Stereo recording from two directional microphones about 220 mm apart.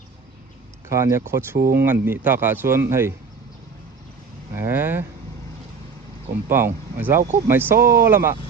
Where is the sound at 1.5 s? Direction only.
45° right (ahead or behind).